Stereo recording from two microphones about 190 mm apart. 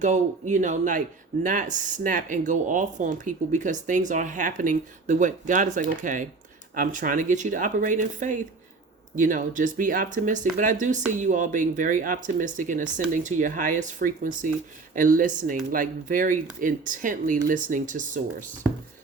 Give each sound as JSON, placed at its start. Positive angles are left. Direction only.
{"t": 0.0, "sound": "speech", "side_deg": -40}